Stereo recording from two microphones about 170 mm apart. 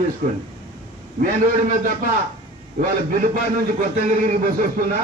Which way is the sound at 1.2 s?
50° right (ahead or behind).